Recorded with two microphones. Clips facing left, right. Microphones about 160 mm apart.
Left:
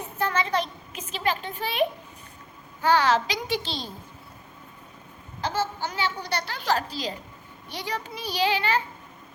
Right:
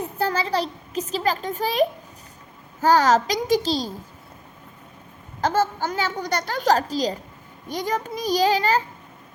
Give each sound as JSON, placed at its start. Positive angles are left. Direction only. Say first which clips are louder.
{"t": 0.2, "sound": "a child's voice", "louder": "right 2 dB", "side_deg": -35}
{"t": 5.4, "sound": "a woman's voice", "louder": "right 6 dB", "side_deg": -45}